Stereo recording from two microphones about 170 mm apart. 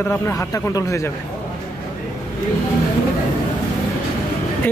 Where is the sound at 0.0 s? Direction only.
15° left (ahead or behind).